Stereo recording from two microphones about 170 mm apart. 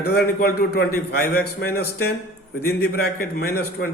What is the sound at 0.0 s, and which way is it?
A man's voice, 65° left (ahead or behind).